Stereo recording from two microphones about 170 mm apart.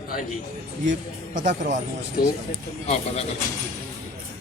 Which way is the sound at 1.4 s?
45° right (ahead or behind).